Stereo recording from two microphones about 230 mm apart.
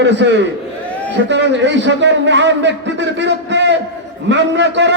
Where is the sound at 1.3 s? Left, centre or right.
Right.